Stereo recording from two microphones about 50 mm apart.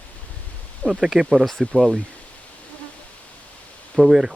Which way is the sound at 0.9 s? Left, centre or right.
Right.